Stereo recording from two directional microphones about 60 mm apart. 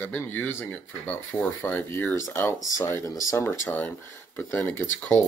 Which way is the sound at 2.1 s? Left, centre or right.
Left.